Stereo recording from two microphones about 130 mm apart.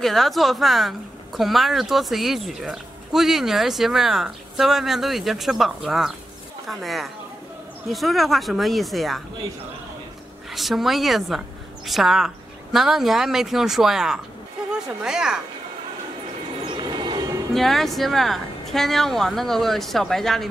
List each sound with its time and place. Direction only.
0.0 s speech: centre (ahead or behind)
10.5 s a woman's voice: centre (ahead or behind)
16.6 s train: 35° right (ahead or behind)
17.6 s speech: centre (ahead or behind)